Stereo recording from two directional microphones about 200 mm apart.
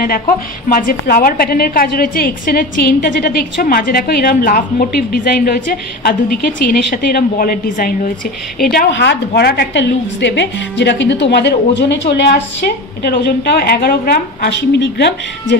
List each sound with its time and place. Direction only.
0.7 s a woman's voice: 45° left (ahead or behind)
8.9 s a woman's voice: 55° left (ahead or behind)